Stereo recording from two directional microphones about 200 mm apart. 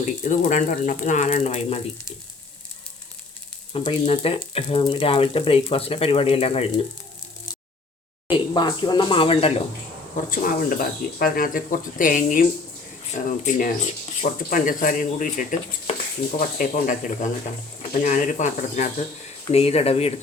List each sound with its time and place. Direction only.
0.0 s speech: 40° left (ahead or behind)
3.7 s speech: 25° left (ahead or behind)
8.3 s speech: 25° left (ahead or behind)
10.2 s speech: 45° left (ahead or behind)